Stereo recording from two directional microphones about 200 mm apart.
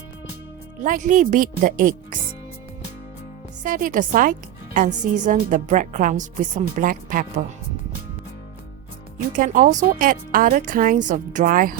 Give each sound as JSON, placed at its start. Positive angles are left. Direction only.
{"t": 0.8, "sound": "a woman's voice", "side_deg": -40}
{"t": 3.6, "sound": "a woman's voice", "side_deg": -40}
{"t": 9.3, "sound": "speech", "side_deg": -40}